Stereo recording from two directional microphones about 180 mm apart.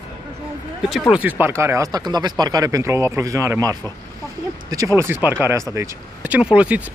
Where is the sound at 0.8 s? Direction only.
Centre (ahead or behind).